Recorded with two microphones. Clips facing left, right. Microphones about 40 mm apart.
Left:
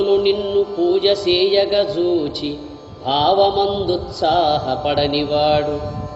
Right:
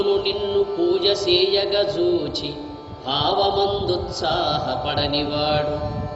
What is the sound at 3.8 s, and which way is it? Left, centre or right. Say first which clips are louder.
Mantra: left 4 dB; centre.